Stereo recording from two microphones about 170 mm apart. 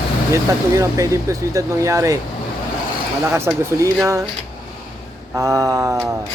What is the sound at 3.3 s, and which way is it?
Speech, 15° right (ahead or behind).